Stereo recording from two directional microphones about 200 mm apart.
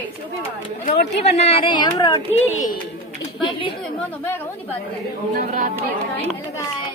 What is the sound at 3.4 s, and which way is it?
Speech, 25° left (ahead or behind).